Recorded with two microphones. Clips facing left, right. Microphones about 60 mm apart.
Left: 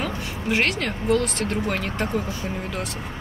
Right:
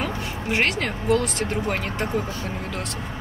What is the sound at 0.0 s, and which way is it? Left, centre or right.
Speech, centre.